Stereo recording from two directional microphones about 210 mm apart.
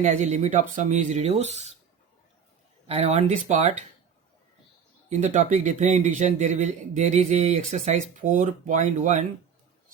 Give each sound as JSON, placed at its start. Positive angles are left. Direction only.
{"t": 0.0, "sound": "a man's voice", "side_deg": -35}
{"t": 2.8, "sound": "a man's voice", "side_deg": -30}
{"t": 5.0, "sound": "a man's voice", "side_deg": -35}